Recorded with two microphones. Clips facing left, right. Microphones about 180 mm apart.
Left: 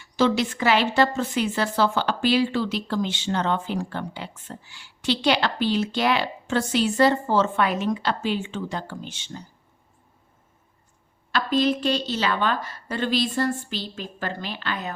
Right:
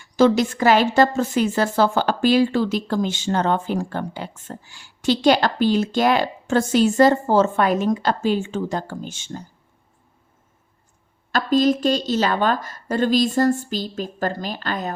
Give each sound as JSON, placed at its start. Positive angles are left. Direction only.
{"t": 0.0, "sound": "a woman's voice", "side_deg": -45}
{"t": 11.3, "sound": "a woman's voice", "side_deg": -45}